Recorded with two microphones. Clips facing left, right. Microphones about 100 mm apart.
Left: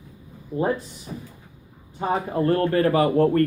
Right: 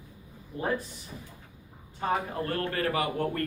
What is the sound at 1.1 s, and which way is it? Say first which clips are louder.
Speech: left 10 dB; 55° left (ahead or behind).